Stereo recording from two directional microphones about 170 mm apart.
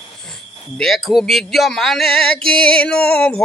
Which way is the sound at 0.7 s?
Centre (ahead or behind).